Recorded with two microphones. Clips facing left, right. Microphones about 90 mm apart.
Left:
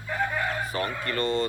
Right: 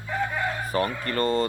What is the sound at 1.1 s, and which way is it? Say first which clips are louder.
Speech: even; 40° right (ahead or behind).